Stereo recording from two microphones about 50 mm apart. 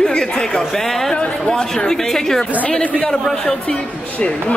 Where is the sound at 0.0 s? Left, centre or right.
Centre.